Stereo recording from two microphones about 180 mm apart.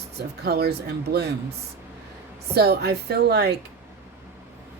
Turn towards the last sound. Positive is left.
turn(degrees=-65)  # may be behind; listen again after turning